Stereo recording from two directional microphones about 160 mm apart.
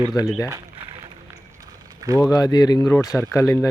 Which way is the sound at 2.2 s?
20° left (ahead or behind).